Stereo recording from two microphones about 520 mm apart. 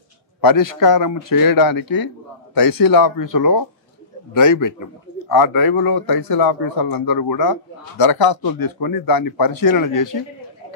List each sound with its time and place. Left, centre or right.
0.4 s speech: left